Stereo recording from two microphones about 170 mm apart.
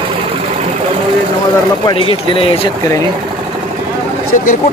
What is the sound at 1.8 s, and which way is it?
Speech, 30° left (ahead or behind).